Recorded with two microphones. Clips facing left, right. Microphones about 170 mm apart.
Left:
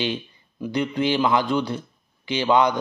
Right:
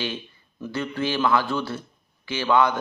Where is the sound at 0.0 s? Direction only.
15° left (ahead or behind).